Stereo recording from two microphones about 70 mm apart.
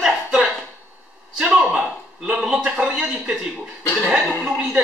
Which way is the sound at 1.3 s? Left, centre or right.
Centre.